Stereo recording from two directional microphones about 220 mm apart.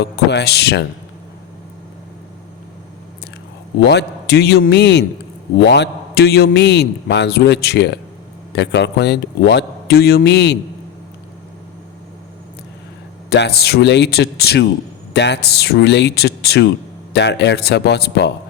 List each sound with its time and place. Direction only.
0.0 s a man's voice: 50° left (ahead or behind)
3.8 s a man's voice: 50° left (ahead or behind)
13.3 s a man's voice: 50° left (ahead or behind)